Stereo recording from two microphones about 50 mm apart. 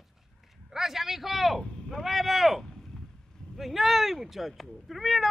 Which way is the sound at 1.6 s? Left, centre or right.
Centre.